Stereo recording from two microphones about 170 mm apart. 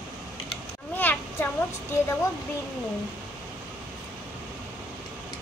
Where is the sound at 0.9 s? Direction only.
10° left (ahead or behind).